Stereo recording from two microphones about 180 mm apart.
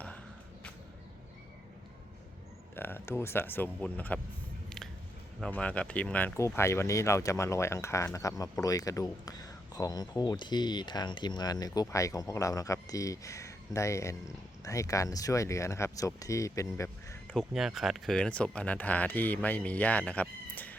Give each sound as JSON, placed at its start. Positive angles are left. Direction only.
{"t": 2.7, "sound": "speech", "side_deg": 10}
{"t": 5.4, "sound": "speech", "side_deg": 5}
{"t": 17.3, "sound": "speech", "side_deg": 0}